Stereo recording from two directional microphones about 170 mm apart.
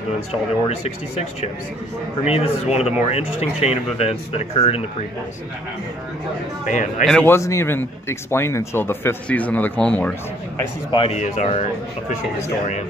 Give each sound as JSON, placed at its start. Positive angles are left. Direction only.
{"t": 0.3, "sound": "speech", "side_deg": 40}
{"t": 2.2, "sound": "speech", "side_deg": 35}
{"t": 6.7, "sound": "speech", "side_deg": 50}
{"t": 7.1, "sound": "speech", "side_deg": 5}
{"t": 7.3, "sound": "speech", "side_deg": 15}
{"t": 10.9, "sound": "speech", "side_deg": 30}
{"t": 11.1, "sound": "speech", "side_deg": 45}